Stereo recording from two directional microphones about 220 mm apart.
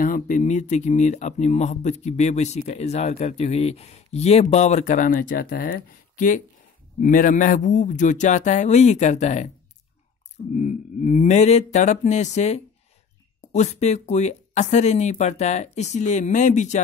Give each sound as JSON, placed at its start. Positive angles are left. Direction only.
{"t": 0.0, "sound": "speech", "side_deg": 35}
{"t": 10.5, "sound": "speech", "side_deg": 35}